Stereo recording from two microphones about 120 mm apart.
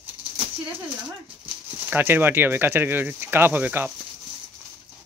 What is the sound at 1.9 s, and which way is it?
Speech, 15° right (ahead or behind).